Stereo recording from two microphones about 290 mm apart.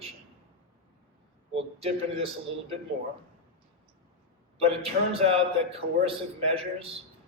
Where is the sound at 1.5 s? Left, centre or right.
Centre.